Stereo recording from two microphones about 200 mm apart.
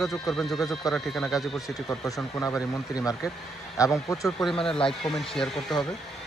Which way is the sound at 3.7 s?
15° left (ahead or behind).